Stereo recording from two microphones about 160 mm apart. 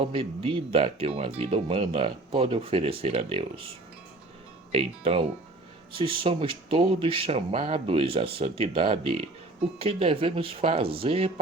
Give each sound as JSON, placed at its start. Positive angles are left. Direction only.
{"t": 0.0, "sound": "speech", "side_deg": -35}
{"t": 4.7, "sound": "speech", "side_deg": -35}